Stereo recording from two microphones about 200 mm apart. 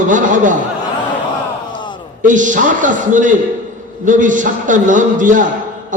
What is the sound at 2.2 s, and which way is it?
A man's voice, 40° right (ahead or behind).